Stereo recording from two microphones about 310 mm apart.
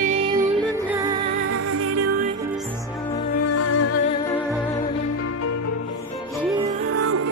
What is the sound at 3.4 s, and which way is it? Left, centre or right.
Music, left.